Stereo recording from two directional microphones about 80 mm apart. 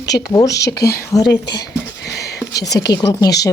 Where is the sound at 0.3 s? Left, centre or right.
Left.